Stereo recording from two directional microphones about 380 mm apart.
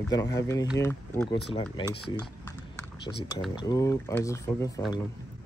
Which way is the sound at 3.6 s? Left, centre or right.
Centre.